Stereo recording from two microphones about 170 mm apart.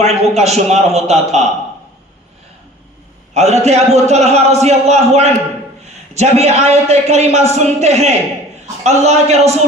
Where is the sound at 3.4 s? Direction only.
40° right (ahead or behind).